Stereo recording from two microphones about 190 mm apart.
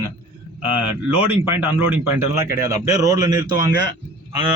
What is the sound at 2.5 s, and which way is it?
Speech, 15° right (ahead or behind).